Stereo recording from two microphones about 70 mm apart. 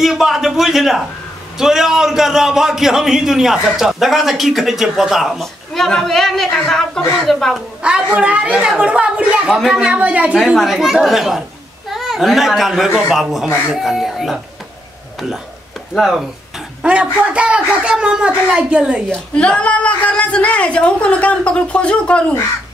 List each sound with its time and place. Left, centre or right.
0.0 s a man's voice: centre
7.8 s a woman's voice: centre
16.8 s a woman's voice: centre
19.3 s speech: centre